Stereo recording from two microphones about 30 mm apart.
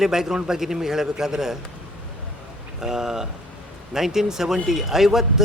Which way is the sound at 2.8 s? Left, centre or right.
Centre.